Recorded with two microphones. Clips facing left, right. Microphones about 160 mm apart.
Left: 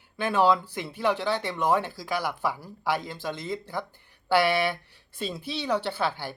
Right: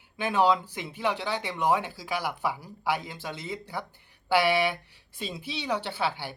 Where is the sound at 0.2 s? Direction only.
15° right (ahead or behind).